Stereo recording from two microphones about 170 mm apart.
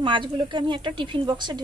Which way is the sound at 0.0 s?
30° right (ahead or behind).